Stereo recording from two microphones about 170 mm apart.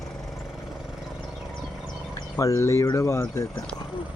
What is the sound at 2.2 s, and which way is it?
Speech, 20° left (ahead or behind).